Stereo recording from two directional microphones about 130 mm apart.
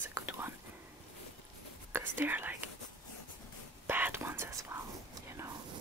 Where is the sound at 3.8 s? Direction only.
15° right (ahead or behind).